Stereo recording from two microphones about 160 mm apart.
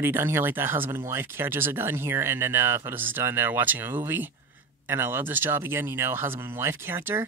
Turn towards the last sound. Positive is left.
turn(degrees=-15)  # may be behind; listen again after turning